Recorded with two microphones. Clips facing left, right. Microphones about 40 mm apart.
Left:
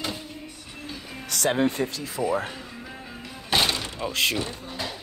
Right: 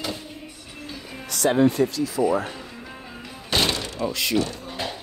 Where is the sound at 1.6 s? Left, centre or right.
Left.